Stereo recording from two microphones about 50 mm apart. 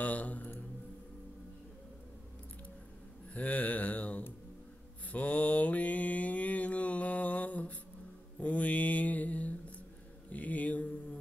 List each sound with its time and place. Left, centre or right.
0.0 s a man's voice: left
3.3 s speech: left
5.1 s mantra: left